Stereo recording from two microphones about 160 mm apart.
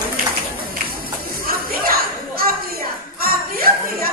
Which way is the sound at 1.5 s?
65° right (ahead or behind).